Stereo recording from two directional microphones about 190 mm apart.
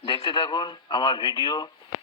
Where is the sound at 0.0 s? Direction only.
25° left (ahead or behind).